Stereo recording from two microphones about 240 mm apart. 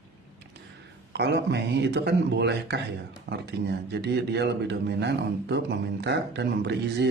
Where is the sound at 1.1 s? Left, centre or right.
Right.